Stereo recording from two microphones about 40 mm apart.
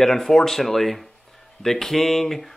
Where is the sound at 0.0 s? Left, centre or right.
Centre.